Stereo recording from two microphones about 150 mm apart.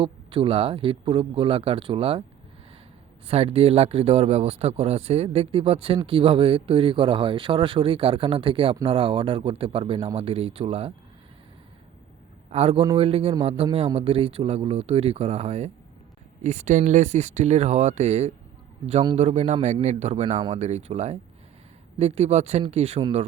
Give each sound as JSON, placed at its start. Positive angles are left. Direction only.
{"t": 0.0, "sound": "speech", "side_deg": -35}
{"t": 3.2, "sound": "speech", "side_deg": -40}
{"t": 12.5, "sound": "a man's voice", "side_deg": -40}